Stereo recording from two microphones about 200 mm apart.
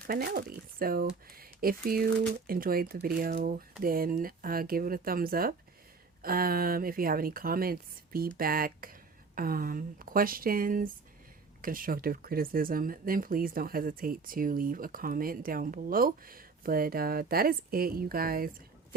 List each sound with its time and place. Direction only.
0.1 s speech: 45° right (ahead or behind)